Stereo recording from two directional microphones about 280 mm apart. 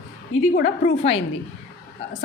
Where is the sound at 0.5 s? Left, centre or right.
Left.